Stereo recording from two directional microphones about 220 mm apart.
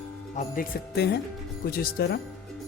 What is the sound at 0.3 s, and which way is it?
A man's voice, 40° left (ahead or behind).